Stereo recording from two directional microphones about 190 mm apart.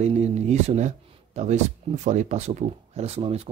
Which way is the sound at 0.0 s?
35° right (ahead or behind).